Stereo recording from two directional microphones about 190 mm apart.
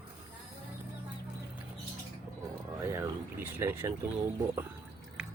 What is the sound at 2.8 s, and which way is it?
Speech, 10° right (ahead or behind).